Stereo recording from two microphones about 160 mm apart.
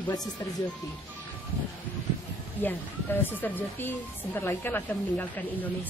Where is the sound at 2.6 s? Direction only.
10° left (ahead or behind).